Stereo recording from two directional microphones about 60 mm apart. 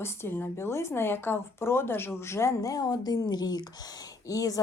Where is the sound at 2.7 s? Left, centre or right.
Left.